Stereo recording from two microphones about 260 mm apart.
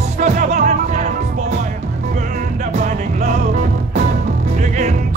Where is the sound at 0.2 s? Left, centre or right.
Right.